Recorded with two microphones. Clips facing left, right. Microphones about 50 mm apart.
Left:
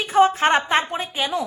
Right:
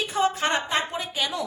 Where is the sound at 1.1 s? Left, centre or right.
Centre.